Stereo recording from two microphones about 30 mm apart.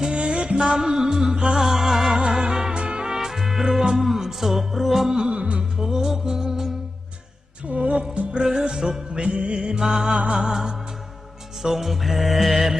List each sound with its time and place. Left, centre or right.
0.0 s music: right
0.7 s music: right
2.7 s music: right
3.1 s music: centre
5.2 s music: right
5.7 s music: centre
7.7 s music: right
8.1 s music: right
8.7 s music: right
9.1 s music: right; by 12.8 s centre